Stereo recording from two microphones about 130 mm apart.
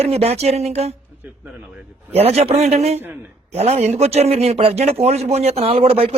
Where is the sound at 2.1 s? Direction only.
50° right (ahead or behind).